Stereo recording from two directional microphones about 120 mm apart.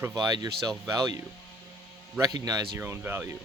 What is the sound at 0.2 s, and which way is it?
A man's voice, 30° right (ahead or behind).